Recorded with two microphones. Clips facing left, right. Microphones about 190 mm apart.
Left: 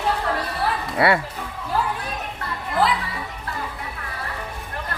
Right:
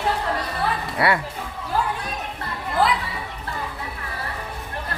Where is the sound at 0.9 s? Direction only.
25° left (ahead or behind).